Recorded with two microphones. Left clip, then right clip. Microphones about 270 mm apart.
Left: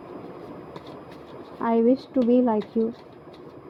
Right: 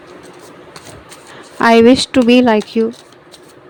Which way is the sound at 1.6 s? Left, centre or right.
Right.